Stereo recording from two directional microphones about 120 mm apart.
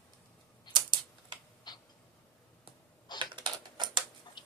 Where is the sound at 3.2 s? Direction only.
40° right (ahead or behind).